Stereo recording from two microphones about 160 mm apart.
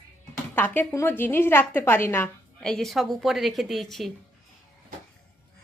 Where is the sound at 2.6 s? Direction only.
5° left (ahead or behind).